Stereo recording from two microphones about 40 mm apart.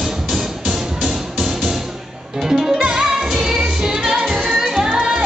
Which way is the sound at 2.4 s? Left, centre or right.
Centre.